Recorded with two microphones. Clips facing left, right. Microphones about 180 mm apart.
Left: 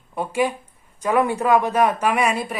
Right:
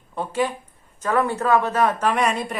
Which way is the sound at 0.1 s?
10° left (ahead or behind).